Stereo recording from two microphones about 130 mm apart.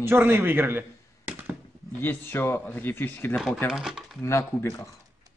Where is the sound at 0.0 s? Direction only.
15° right (ahead or behind).